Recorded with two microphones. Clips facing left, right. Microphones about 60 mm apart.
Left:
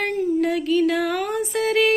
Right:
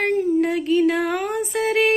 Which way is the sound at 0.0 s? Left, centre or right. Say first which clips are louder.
Right 2 dB; right.